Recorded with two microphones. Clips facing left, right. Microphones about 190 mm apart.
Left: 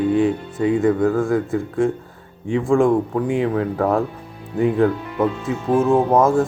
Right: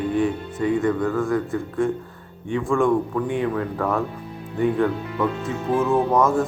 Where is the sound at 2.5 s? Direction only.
25° left (ahead or behind).